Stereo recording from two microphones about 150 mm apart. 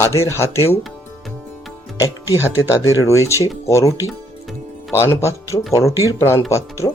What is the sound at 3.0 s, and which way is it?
Speech, 20° left (ahead or behind).